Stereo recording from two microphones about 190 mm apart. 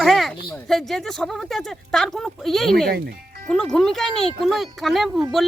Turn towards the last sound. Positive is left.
turn(degrees=0)  # may be behind; listen again after turning